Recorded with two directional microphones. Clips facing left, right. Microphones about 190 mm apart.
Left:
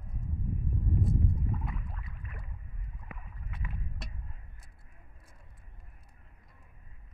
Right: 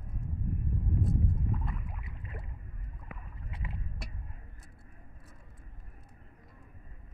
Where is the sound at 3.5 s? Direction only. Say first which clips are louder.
Even; 25° right (ahead or behind).